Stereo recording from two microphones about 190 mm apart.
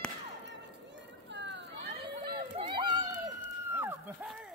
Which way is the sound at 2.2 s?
25° right (ahead or behind).